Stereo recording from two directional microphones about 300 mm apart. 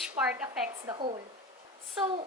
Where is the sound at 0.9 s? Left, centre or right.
Centre.